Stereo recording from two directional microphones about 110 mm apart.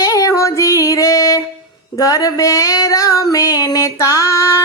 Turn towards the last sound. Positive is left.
turn(degrees=25)  # may be behind; listen again after turning